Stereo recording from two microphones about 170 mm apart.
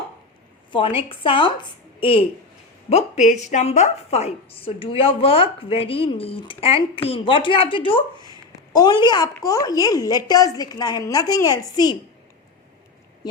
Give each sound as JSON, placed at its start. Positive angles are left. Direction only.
{"t": 0.7, "sound": "a woman's voice", "side_deg": 30}